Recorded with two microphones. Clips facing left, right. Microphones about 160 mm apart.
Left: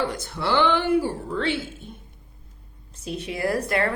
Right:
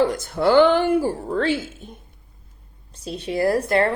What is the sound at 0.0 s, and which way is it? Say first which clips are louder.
Speech: right 8 dB; 45° right (ahead or behind).